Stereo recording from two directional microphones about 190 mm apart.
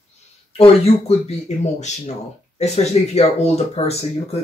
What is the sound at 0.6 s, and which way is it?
Speech, 30° left (ahead or behind).